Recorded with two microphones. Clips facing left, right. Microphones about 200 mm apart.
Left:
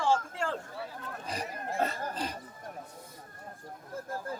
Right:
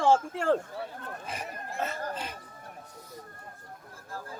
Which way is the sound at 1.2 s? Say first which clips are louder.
Left 5 dB; 35° left (ahead or behind).